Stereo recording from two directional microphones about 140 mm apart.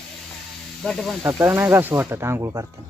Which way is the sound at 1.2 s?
20° right (ahead or behind).